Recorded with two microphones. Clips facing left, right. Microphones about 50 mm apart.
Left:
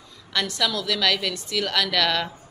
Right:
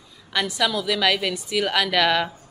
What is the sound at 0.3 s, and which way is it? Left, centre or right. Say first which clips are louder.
A woman's voice: right 2 dB; centre.